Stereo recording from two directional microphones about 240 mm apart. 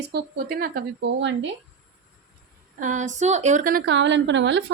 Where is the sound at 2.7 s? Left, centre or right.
Right.